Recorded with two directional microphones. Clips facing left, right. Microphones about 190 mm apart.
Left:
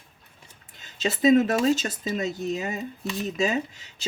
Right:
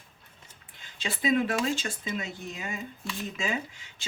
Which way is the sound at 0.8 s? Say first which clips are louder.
Left 9 dB; 40° left (ahead or behind).